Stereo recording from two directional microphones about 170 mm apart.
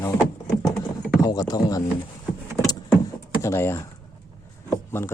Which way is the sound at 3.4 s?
15° left (ahead or behind).